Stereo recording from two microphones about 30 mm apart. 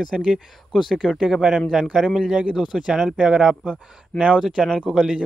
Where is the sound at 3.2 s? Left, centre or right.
Right.